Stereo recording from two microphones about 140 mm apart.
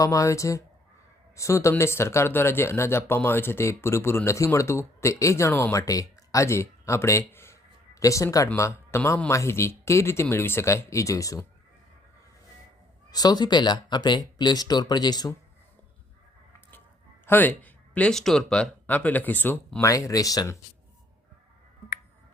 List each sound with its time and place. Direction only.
0.0 s speech: 25° left (ahead or behind)
13.1 s speech: 30° left (ahead or behind)
17.2 s speech: 15° left (ahead or behind)